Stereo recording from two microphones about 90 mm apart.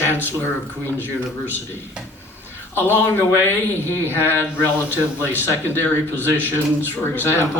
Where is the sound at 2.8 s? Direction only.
25° left (ahead or behind).